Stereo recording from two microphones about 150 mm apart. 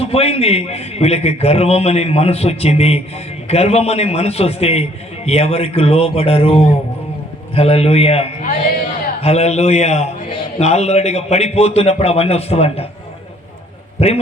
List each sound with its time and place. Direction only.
0.0 s a man's voice: 40° left (ahead or behind)
14.0 s a man's voice: 45° left (ahead or behind)